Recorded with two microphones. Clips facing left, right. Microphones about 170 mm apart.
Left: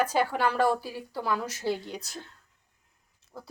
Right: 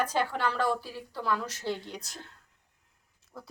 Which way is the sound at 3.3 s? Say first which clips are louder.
Left 2 dB; 25° left (ahead or behind).